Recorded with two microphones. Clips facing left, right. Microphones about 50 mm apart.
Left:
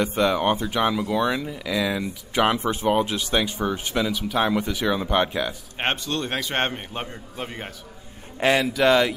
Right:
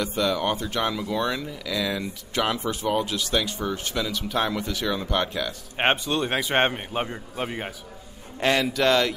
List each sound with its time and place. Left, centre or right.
0.0 s speech: left; by 2.4 s centre
2.4 s speech: left
4.2 s speech: centre
4.5 s speech: centre
5.8 s a man's voice: centre
8.4 s a man's voice: centre